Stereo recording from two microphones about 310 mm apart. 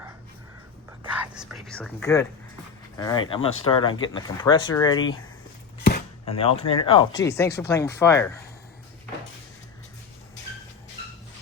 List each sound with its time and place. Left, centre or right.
1.1 s speech: centre
6.2 s speech: centre